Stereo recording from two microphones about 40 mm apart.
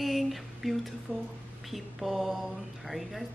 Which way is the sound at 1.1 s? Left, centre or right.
Right.